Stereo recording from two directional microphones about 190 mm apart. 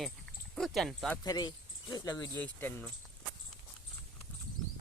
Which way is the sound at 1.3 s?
20° left (ahead or behind).